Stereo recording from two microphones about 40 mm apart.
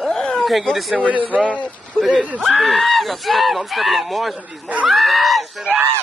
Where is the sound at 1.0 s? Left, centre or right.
Right.